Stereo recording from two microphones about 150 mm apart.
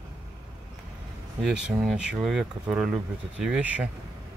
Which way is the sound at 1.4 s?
5° right (ahead or behind).